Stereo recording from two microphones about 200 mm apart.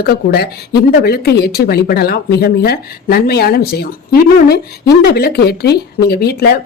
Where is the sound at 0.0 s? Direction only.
55° left (ahead or behind).